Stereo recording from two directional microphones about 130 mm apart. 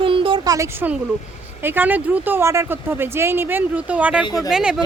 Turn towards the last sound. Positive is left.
turn(degrees=-5)  # may be behind; listen again after turning